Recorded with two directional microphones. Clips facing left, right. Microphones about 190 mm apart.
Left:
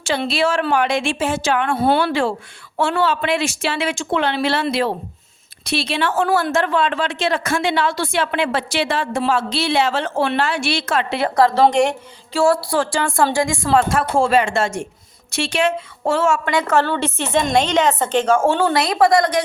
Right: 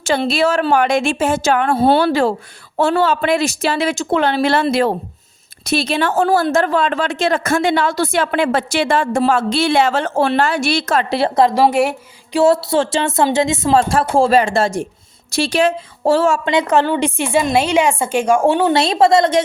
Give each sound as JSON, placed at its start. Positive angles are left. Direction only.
{"t": 0.0, "sound": "a woman's voice", "side_deg": -45}
{"t": 1.7, "sound": "a woman's voice", "side_deg": -30}
{"t": 11.3, "sound": "speech", "side_deg": -20}
{"t": 11.6, "sound": "a woman's voice", "side_deg": -5}
{"t": 12.3, "sound": "a woman's voice", "side_deg": -20}
{"t": 16.5, "sound": "a woman's voice", "side_deg": -20}